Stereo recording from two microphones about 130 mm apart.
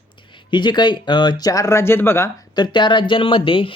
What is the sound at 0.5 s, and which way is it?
Speech, 35° left (ahead or behind).